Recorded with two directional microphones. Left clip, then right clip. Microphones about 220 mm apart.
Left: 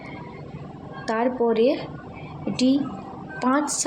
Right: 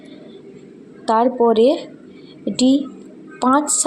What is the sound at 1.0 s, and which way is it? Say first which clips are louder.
A woman's voice: right 8 dB; 25° right (ahead or behind).